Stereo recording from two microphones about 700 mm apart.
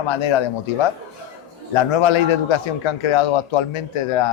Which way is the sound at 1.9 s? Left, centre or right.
Left.